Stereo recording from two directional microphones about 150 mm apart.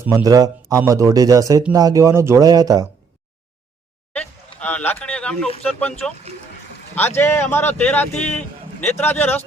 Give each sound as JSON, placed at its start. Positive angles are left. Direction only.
{"t": 0.1, "sound": "speech", "side_deg": -20}
{"t": 4.6, "sound": "speech", "side_deg": 10}
{"t": 7.2, "sound": "speech", "side_deg": 15}